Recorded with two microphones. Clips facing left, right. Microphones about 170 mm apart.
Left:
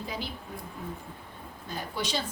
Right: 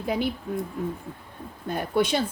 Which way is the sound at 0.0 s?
60° right (ahead or behind).